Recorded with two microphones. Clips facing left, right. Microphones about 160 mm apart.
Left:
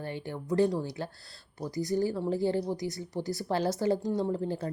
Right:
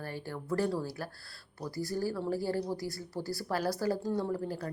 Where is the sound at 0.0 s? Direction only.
20° left (ahead or behind).